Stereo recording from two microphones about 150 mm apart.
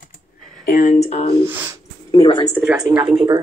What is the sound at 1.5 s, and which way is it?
Speech, 15° right (ahead or behind).